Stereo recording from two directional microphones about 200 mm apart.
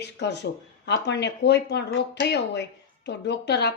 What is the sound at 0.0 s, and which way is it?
Speech, 60° left (ahead or behind).